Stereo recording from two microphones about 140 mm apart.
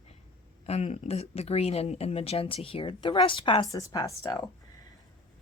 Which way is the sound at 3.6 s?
25° left (ahead or behind).